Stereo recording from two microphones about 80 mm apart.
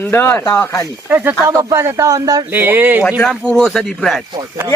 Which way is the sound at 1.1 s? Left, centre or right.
Right.